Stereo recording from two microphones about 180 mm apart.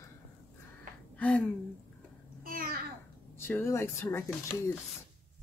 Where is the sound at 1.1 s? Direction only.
5° left (ahead or behind).